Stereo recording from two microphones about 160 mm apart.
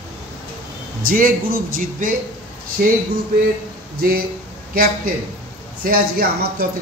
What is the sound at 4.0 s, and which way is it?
Speech, 65° right (ahead or behind).